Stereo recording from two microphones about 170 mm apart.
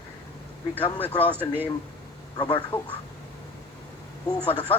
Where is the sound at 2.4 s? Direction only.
30° left (ahead or behind).